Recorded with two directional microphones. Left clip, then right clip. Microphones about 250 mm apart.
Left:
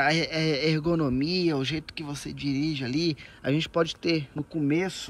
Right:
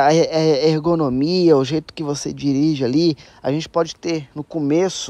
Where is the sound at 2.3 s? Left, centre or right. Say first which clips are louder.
Right 8 dB; right.